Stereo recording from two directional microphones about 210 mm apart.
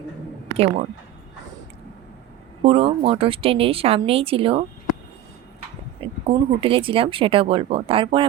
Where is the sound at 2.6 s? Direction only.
25° right (ahead or behind).